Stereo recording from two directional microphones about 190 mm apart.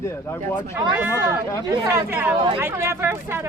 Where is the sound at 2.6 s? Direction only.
10° right (ahead or behind).